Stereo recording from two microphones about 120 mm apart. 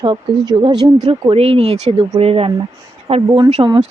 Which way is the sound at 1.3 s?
55° right (ahead or behind).